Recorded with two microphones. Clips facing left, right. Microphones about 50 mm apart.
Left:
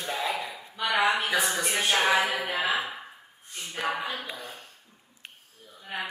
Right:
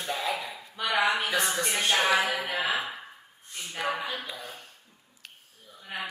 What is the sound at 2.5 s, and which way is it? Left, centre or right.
Mantra, left.